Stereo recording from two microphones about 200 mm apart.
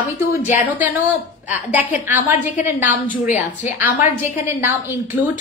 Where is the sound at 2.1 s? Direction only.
10° right (ahead or behind).